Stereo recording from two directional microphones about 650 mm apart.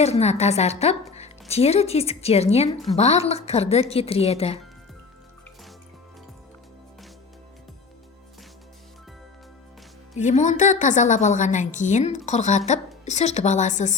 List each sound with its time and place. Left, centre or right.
0.0 s a woman's voice: centre
10.2 s a woman's voice: centre